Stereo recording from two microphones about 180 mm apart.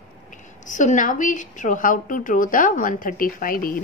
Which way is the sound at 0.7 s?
45° left (ahead or behind).